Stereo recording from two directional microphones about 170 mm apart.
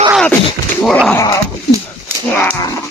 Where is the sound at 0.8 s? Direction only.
Centre (ahead or behind).